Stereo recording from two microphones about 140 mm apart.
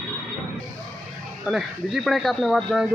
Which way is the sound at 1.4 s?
5° right (ahead or behind).